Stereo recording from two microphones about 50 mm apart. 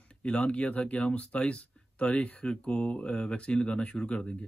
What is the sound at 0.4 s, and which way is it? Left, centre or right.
Speech, left.